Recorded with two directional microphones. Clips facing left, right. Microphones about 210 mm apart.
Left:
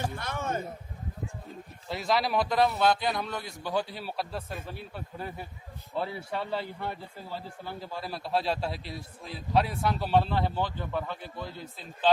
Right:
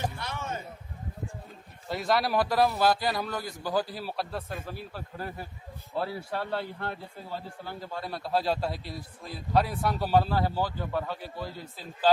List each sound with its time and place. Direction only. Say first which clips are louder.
0.2 s a man's voice: left 3 dB; 50° left (ahead or behind)
1.9 s a man's voice: right 1 dB; centre (ahead or behind)